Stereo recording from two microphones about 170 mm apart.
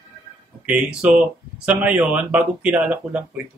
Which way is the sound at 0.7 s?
5° right (ahead or behind).